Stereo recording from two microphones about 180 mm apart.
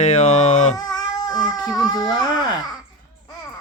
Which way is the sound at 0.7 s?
20° left (ahead or behind).